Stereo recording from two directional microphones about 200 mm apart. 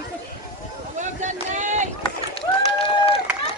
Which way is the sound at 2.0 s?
25° left (ahead or behind).